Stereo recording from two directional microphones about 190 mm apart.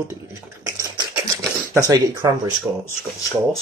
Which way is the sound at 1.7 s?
15° right (ahead or behind).